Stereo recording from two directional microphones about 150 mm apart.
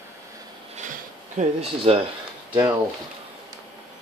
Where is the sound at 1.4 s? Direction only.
45° right (ahead or behind).